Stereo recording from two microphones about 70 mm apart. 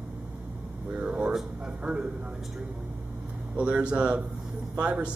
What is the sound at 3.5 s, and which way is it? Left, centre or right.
Speech, centre.